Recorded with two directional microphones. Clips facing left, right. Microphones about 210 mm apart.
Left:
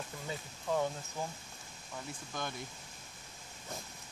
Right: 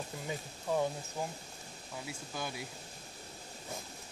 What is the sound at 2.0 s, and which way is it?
Speech, 5° right (ahead or behind).